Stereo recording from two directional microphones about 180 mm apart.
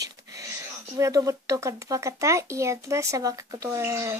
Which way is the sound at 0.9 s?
15° right (ahead or behind).